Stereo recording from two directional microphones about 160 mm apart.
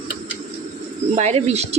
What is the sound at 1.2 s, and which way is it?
Speech, 40° right (ahead or behind).